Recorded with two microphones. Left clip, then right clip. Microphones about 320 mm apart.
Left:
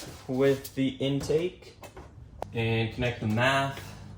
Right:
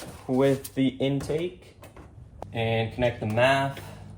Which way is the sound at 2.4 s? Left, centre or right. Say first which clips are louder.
Left 1 dB; centre.